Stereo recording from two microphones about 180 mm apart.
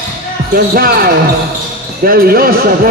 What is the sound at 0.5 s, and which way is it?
Speech, 55° right (ahead or behind).